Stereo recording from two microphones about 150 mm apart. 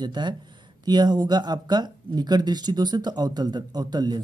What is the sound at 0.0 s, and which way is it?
Speech, 30° right (ahead or behind).